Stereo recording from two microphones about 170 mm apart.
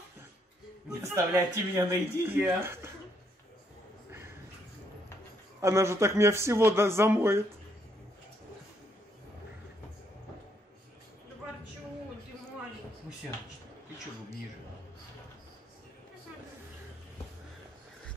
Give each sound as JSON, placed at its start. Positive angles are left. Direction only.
{"t": 0.8, "sound": "speech", "side_deg": -15}
{"t": 5.6, "sound": "speech", "side_deg": -15}